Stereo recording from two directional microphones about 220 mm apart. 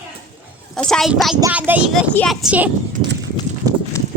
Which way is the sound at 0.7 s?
5° left (ahead or behind).